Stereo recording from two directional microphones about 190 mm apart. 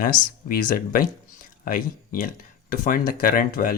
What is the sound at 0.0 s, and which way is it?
Speech, 45° left (ahead or behind).